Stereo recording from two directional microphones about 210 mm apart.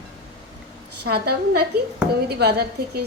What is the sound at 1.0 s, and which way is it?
A woman's voice, 50° right (ahead or behind).